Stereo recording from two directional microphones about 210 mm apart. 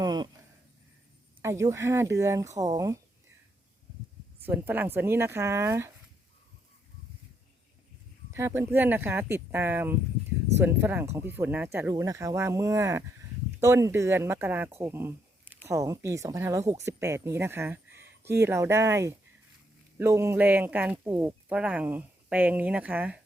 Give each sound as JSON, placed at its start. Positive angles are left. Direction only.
{"t": 0.0, "sound": "a sound", "side_deg": -20}
{"t": 1.4, "sound": "speech", "side_deg": -15}
{"t": 4.4, "sound": "speech", "side_deg": -10}
{"t": 8.3, "sound": "speech", "side_deg": -10}